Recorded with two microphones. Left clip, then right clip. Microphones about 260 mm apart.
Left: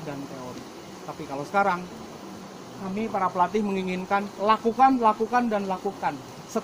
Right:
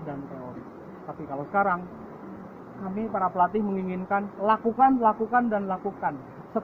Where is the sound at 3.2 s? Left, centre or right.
Centre.